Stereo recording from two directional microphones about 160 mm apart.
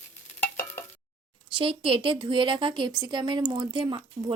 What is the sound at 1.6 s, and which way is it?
Speech, 35° right (ahead or behind).